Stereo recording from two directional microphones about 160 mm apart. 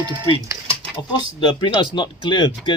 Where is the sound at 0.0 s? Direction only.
25° right (ahead or behind).